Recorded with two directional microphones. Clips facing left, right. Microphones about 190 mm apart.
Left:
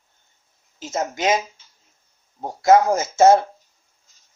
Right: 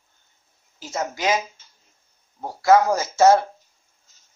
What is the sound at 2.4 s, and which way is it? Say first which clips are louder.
Speech: left 1 dB; 20° left (ahead or behind).